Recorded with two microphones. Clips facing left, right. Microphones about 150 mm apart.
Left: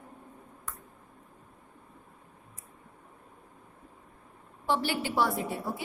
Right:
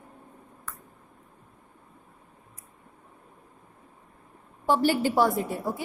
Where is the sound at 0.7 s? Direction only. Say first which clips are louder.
Right 1 dB; 15° left (ahead or behind).